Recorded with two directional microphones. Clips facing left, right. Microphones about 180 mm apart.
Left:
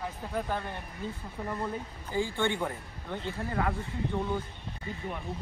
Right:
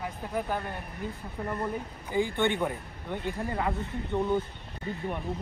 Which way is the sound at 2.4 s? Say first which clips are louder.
Right 3 dB; 20° right (ahead or behind).